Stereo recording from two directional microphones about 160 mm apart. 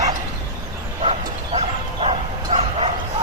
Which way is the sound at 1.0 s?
40° right (ahead or behind).